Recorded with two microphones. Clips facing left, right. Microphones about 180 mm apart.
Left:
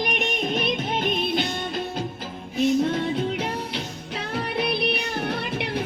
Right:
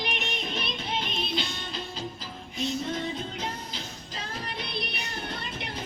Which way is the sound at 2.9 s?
65° left (ahead or behind).